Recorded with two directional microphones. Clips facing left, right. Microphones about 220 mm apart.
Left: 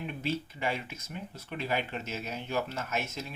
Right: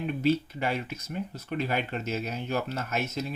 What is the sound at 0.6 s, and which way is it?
Speech, 40° right (ahead or behind).